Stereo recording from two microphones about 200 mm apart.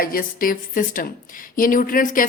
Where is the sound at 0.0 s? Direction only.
45° left (ahead or behind).